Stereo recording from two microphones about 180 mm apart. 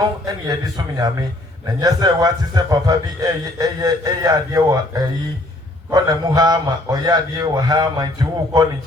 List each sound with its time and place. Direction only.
0.3 s a man's voice: 20° right (ahead or behind)